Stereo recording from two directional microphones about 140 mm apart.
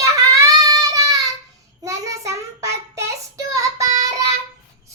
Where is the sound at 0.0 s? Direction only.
25° right (ahead or behind).